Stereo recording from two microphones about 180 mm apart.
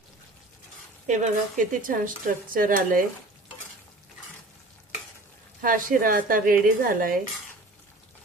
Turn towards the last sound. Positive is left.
turn(degrees=-50)  # may be behind; listen again after turning